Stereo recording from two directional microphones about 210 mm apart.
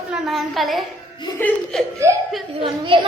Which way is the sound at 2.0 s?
15° right (ahead or behind).